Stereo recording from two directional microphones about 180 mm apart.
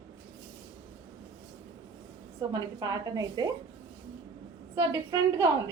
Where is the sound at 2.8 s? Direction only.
20° right (ahead or behind).